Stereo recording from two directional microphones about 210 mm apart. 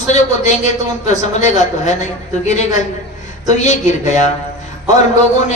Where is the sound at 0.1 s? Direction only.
35° left (ahead or behind).